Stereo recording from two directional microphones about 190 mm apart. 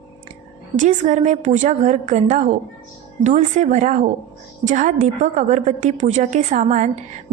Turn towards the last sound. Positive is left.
turn(degrees=-40)  # may be behind; listen again after turning